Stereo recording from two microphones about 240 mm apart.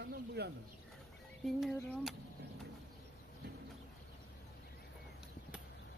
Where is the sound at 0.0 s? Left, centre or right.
Right.